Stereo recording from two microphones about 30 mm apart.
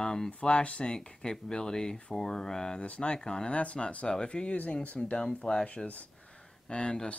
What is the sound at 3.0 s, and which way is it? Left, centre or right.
Speech, left.